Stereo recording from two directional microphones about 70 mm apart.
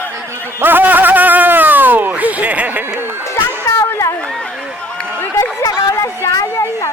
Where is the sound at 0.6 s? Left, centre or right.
Right.